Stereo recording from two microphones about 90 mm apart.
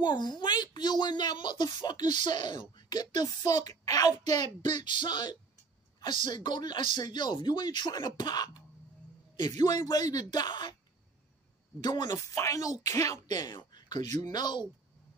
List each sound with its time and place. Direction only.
0.0 s speech: 55° left (ahead or behind)
11.8 s speech: 50° left (ahead or behind)
12.4 s speech: 35° left (ahead or behind)
13.3 s speech: 50° left (ahead or behind)